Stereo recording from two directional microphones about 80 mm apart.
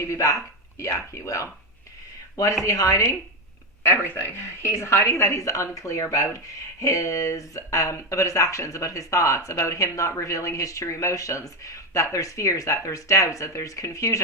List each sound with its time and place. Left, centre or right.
0.0 s a woman's voice: left
3.8 s a woman's voice: left